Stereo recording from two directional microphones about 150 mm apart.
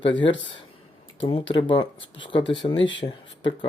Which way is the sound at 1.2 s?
35° left (ahead or behind).